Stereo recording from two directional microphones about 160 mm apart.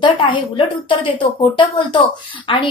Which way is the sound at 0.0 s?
30° left (ahead or behind).